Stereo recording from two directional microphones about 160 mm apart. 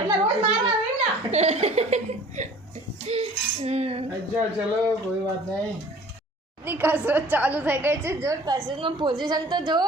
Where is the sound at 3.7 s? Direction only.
40° right (ahead or behind).